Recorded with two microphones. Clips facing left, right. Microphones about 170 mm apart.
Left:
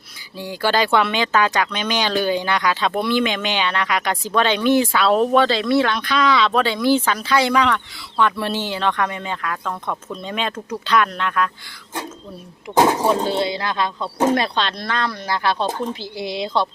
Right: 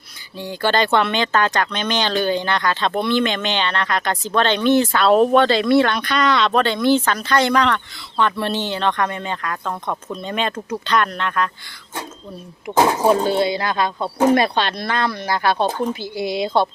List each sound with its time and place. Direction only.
0.3 s speech: 5° left (ahead or behind)
12.7 s speech: 15° right (ahead or behind)
13.6 s speech: 50° right (ahead or behind)
14.5 s speech: 5° right (ahead or behind)
15.3 s speech: 50° right (ahead or behind)